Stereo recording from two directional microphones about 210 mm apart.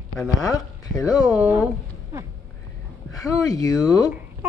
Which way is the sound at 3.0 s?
15° left (ahead or behind).